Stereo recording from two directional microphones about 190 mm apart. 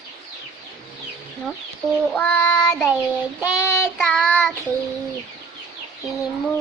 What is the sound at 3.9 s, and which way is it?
Child singing, centre (ahead or behind).